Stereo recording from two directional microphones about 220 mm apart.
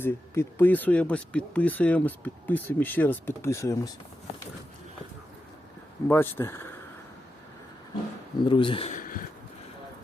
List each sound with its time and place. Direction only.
0.0 s speech: 10° left (ahead or behind)
6.1 s speech: 10° left (ahead or behind)
8.4 s speech: 20° left (ahead or behind); by 9.2 s 40° left (ahead or behind)